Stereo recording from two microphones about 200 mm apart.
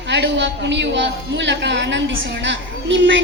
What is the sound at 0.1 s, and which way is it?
A man's voice, 60° right (ahead or behind).